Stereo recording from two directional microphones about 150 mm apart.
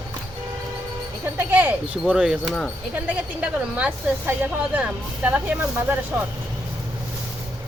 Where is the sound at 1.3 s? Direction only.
10° right (ahead or behind).